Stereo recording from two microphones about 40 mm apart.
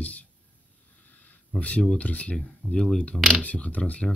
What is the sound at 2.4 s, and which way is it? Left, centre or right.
Speech, left.